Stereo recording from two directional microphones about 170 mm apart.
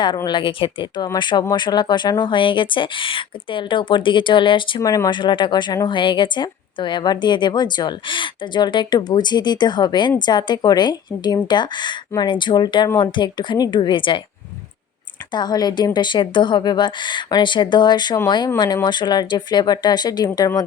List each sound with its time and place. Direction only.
0.3 s speech: 30° left (ahead or behind)
15.3 s speech: 25° left (ahead or behind)